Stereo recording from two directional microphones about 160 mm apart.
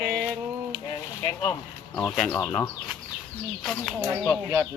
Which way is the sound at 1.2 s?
25° left (ahead or behind).